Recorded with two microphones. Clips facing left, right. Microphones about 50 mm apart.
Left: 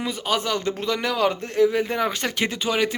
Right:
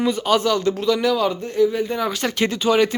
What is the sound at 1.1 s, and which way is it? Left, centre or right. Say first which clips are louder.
Speech: right 1 dB; left.